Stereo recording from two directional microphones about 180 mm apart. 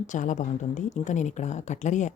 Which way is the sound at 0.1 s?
45° left (ahead or behind).